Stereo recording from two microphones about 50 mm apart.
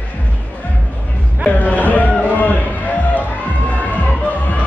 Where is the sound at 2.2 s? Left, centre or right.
Left.